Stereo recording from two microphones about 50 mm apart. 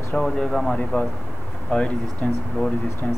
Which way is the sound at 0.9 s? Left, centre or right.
Left.